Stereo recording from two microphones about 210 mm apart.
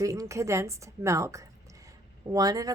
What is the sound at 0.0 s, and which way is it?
A woman's voice, 15° right (ahead or behind).